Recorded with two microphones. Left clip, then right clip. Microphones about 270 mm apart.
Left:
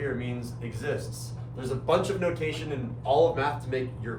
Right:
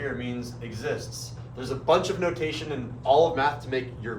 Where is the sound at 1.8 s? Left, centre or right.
Right.